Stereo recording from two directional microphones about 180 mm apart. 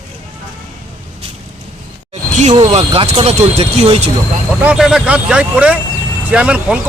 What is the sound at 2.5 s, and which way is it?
Speech, 35° right (ahead or behind).